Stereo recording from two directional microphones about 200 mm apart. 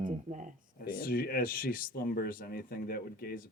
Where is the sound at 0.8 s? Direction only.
45° left (ahead or behind).